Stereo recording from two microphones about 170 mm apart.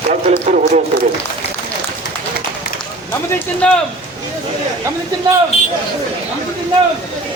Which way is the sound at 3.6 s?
5° left (ahead or behind).